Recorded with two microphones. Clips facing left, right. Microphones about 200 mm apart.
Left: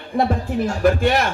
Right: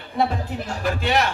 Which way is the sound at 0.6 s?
50° left (ahead or behind).